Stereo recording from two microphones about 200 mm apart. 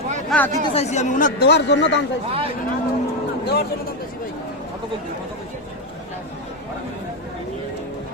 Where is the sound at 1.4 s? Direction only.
55° left (ahead or behind).